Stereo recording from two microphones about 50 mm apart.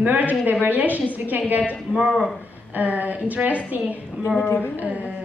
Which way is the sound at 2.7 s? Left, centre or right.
Right.